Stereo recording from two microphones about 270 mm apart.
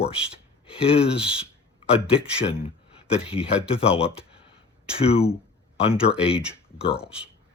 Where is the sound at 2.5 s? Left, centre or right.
Left.